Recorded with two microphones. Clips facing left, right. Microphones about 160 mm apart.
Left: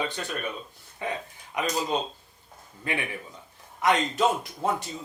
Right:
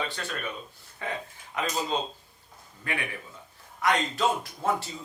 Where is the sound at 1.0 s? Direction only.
15° left (ahead or behind).